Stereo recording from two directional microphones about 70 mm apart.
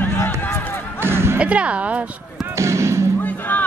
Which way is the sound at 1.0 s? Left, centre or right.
Right.